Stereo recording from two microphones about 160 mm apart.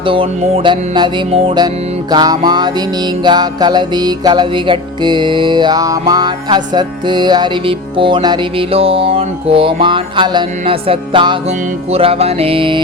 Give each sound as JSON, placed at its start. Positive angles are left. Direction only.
{"t": 0.0, "sound": "music", "side_deg": -35}